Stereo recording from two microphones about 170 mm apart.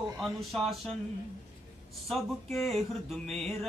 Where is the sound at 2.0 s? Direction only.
Centre (ahead or behind).